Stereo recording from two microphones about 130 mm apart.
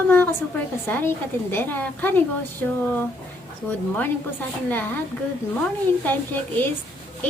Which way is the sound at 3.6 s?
15° left (ahead or behind).